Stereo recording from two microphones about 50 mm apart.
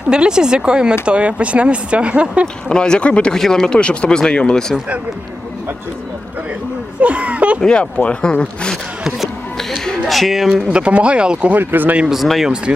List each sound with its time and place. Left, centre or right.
0.1 s speech: centre
2.6 s speech: centre
3.3 s speech: centre
7.0 s speech: right
7.6 s speech: centre
9.0 s speech: centre
9.6 s music: centre
10.1 s speech: centre
10.5 s speech: centre
11.5 s speech: right
12.0 s speech: centre